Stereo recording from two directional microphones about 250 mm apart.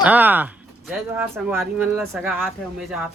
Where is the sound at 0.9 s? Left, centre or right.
Centre.